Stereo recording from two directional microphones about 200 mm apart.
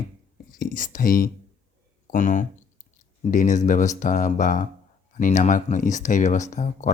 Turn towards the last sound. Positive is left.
turn(degrees=35)  # may be behind; listen again after turning